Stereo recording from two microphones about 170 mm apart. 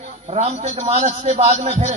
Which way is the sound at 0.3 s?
40° right (ahead or behind).